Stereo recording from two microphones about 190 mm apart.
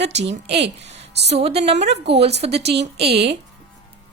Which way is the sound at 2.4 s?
35° right (ahead or behind).